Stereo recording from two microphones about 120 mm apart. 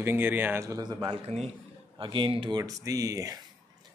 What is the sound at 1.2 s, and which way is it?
Speech, 60° right (ahead or behind).